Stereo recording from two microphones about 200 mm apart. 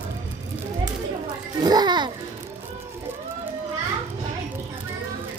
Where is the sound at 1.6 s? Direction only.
20° right (ahead or behind).